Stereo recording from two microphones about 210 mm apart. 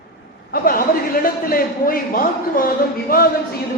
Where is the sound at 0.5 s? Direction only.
45° left (ahead or behind).